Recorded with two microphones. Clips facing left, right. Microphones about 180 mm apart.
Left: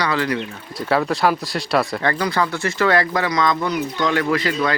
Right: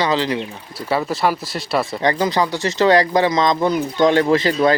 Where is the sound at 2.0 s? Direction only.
20° right (ahead or behind).